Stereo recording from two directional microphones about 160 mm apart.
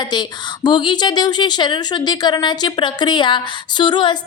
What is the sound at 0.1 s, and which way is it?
A woman's voice, 25° left (ahead or behind).